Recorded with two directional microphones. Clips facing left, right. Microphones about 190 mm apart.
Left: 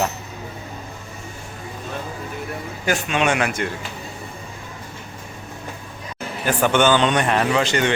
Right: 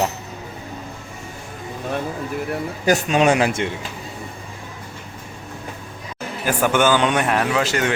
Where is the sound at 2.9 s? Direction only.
40° right (ahead or behind).